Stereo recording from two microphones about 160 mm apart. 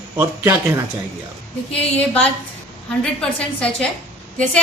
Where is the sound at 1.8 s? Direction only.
10° left (ahead or behind).